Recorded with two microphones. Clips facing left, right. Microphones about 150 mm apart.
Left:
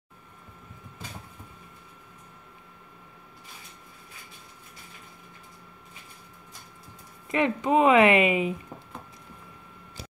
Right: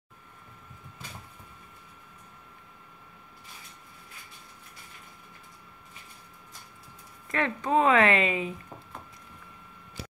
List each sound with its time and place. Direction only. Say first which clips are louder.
7.2 s speech: left 4 dB; 15° left (ahead or behind)